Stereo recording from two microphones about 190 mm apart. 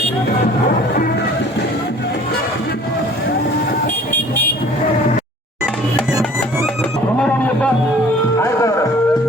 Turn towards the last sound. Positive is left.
turn(degrees=5)  # may be behind; listen again after turning